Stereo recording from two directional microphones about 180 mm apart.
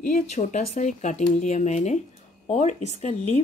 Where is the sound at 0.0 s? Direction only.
45° left (ahead or behind).